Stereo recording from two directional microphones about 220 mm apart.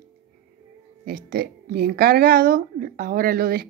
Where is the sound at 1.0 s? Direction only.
45° right (ahead or behind).